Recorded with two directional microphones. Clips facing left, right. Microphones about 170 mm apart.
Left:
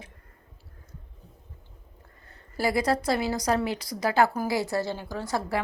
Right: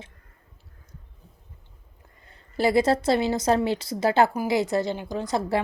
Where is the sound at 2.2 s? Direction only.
20° right (ahead or behind).